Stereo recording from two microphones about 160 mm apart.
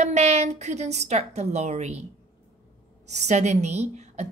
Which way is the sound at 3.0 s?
45° right (ahead or behind).